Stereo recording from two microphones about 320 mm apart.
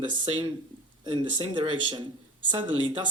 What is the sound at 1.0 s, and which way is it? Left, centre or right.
Speech, centre.